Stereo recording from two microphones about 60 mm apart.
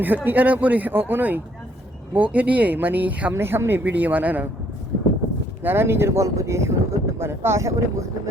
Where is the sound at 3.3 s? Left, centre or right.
Right.